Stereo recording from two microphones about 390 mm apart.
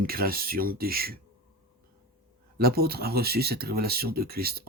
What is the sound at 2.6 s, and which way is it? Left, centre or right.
Speech, right.